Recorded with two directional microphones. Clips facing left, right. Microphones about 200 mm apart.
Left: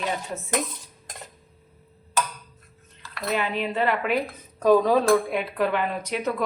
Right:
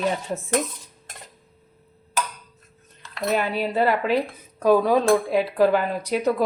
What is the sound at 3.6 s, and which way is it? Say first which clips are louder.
Speech: right 3 dB; 35° right (ahead or behind).